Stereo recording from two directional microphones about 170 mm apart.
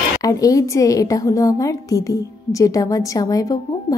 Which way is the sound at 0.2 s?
20° left (ahead or behind).